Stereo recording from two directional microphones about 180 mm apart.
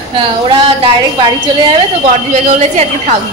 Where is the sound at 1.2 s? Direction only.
35° right (ahead or behind).